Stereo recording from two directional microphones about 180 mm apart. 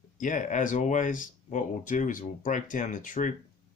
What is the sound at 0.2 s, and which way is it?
Speech, 45° left (ahead or behind).